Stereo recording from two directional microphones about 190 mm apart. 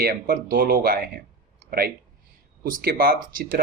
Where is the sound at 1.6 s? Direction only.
50° right (ahead or behind).